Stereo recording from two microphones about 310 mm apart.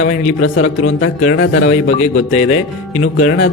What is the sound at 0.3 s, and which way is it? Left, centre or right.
A man's voice, left.